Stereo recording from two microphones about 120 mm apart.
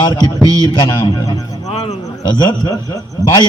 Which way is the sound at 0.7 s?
40° left (ahead or behind).